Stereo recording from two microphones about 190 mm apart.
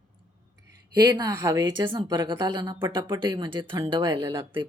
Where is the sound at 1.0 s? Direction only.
20° right (ahead or behind).